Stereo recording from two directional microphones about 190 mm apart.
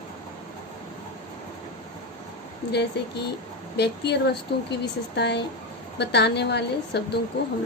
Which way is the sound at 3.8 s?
60° left (ahead or behind).